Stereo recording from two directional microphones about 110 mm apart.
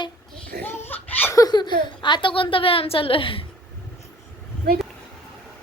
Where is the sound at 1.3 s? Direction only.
40° left (ahead or behind); by 3.5 s 55° left (ahead or behind).